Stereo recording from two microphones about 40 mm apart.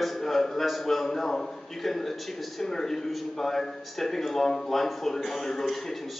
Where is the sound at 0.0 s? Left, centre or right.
Centre.